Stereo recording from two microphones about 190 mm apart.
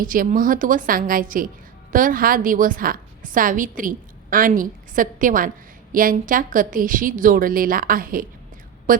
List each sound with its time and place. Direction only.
0.0 s a woman's voice: 45° right (ahead or behind)